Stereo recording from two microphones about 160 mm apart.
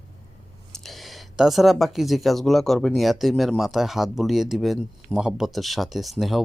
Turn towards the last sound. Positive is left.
turn(degrees=0)  # may be behind; listen again after turning